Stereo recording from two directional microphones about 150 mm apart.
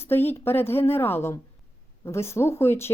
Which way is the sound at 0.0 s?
15° left (ahead or behind).